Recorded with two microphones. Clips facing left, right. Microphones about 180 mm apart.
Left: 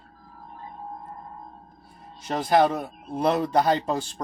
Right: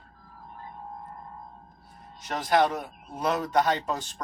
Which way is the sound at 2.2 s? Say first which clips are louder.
Left 3 dB; 30° left (ahead or behind).